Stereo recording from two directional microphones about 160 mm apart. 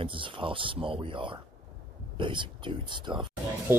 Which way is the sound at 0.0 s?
30° right (ahead or behind).